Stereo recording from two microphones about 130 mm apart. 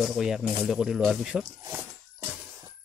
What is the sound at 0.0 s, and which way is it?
Speech, 5° right (ahead or behind).